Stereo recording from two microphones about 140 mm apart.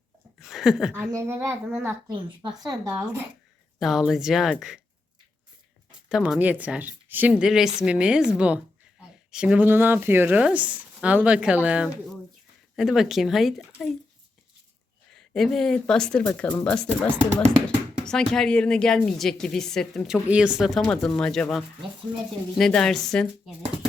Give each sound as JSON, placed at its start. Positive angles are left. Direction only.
{"t": 0.3, "sound": "speech", "side_deg": 0}
{"t": 1.0, "sound": "a child's voice", "side_deg": -20}
{"t": 2.0, "sound": "a woman's voice", "side_deg": -35}
{"t": 2.9, "sound": "a woman's voice", "side_deg": -10}
{"t": 6.1, "sound": "a woman's voice", "side_deg": -5}
{"t": 15.3, "sound": "a woman's voice", "side_deg": 0}